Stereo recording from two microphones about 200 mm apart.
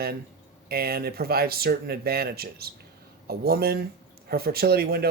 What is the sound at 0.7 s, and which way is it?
Speech, 50° right (ahead or behind).